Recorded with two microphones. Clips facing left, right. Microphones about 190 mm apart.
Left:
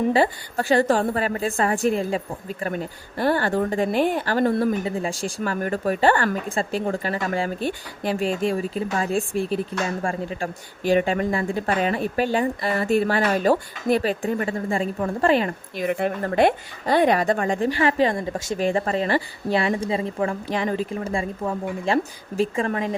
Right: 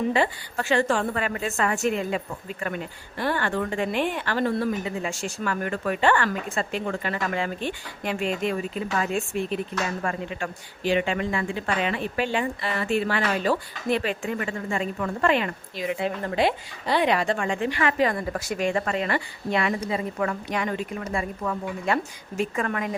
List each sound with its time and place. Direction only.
0.1 s speech: 35° left (ahead or behind)
15.8 s a woman's voice: 55° left (ahead or behind); by 23.0 s 30° left (ahead or behind)